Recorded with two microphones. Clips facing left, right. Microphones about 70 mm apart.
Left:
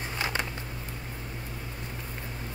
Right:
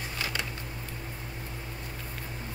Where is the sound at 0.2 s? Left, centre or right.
Left.